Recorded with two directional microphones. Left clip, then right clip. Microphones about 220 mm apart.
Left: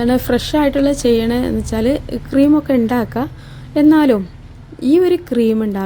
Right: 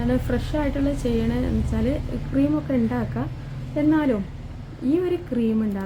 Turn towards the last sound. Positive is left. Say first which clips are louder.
# left 9 dB
turn(degrees=45)  # may be behind; listen again after turning